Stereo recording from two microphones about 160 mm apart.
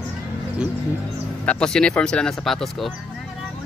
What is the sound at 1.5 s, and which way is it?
Speech, 5° left (ahead or behind).